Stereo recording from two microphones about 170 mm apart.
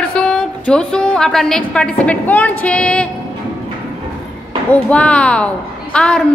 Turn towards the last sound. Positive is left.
turn(degrees=5)  # may be behind; listen again after turning